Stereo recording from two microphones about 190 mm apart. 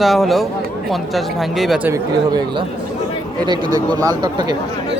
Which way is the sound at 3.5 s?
20° right (ahead or behind).